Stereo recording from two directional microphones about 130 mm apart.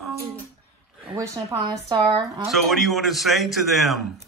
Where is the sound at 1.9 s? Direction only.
30° right (ahead or behind).